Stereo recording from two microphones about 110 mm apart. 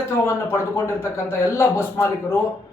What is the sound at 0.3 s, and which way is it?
Speech, 20° left (ahead or behind).